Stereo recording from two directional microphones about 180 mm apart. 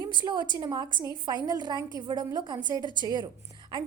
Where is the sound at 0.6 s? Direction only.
20° right (ahead or behind).